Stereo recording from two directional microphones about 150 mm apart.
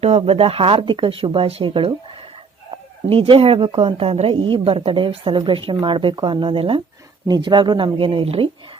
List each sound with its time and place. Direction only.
0.0 s speech: 40° right (ahead or behind)